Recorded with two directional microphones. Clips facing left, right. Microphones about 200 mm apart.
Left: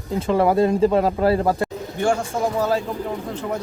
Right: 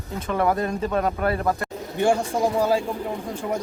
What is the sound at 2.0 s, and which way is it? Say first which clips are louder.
Speech: right 1 dB; 15° right (ahead or behind).